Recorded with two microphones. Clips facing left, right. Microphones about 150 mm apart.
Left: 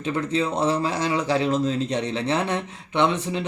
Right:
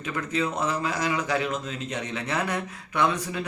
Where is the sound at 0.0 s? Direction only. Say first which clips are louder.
Left 4 dB; 30° left (ahead or behind).